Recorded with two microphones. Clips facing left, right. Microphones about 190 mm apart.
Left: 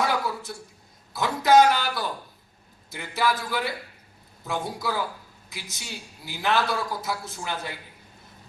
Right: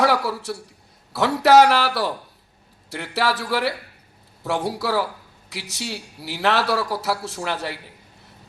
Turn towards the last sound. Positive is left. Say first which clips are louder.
# right 6 dB
turn(degrees=-70)  # may be behind; listen again after turning